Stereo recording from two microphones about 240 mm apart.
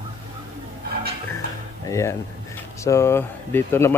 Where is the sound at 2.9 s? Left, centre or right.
Centre.